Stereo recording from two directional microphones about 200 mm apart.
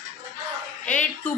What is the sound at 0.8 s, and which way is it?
Speech, 5° left (ahead or behind).